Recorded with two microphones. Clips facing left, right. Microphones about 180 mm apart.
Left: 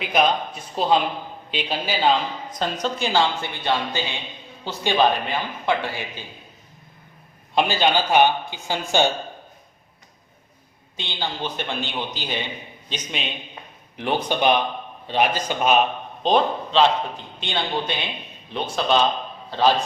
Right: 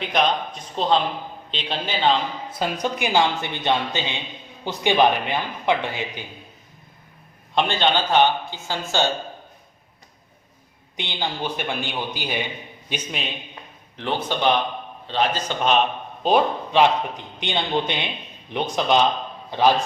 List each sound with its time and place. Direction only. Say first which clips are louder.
0.0 s a woman's voice: left 1 dB; 5° left (ahead or behind)
2.5 s a man's voice: right 1 dB; 10° right (ahead or behind)
7.5 s a woman's voice: left 1 dB; 5° left (ahead or behind)
10.9 s a man's voice: right 1 dB; 15° right (ahead or behind); by 13.2 s centre (ahead or behind)
13.9 s a woman's voice: left 2 dB; 15° left (ahead or behind)
16.2 s a man's voice: right 1 dB; 10° right (ahead or behind)